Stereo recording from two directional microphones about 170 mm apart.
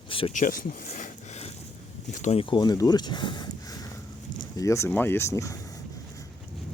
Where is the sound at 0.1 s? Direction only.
30° left (ahead or behind).